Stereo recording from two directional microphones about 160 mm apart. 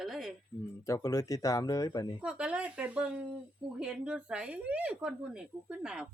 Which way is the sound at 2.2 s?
5° right (ahead or behind).